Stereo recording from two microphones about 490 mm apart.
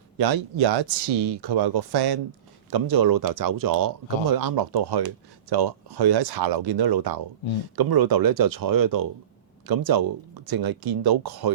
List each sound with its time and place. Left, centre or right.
0.2 s speech: right